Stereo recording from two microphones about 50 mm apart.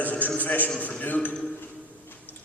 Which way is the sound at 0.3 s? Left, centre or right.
Left.